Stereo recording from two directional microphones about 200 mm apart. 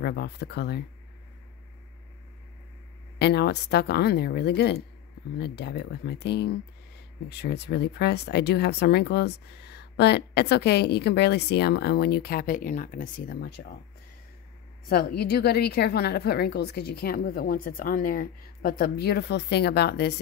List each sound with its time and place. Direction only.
0.0 s speech: 55° left (ahead or behind)
3.2 s speech: 55° left (ahead or behind)
14.9 s a woman's voice: 50° left (ahead or behind)